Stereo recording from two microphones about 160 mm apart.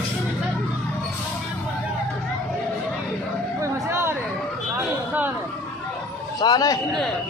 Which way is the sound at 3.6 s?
15° right (ahead or behind).